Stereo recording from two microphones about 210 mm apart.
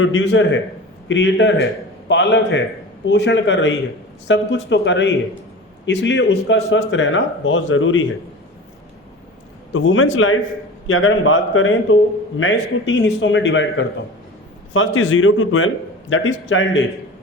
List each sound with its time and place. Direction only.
0.0 s speech: 60° left (ahead or behind)
9.7 s a man's voice: 70° left (ahead or behind)